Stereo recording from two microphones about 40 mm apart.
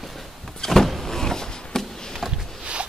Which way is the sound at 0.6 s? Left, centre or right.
Centre.